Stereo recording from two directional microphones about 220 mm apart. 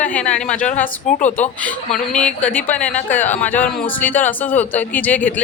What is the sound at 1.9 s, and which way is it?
Speech, 5° left (ahead or behind).